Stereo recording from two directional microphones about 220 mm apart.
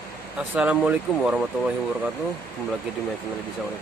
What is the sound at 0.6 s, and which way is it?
Speech, 5° right (ahead or behind).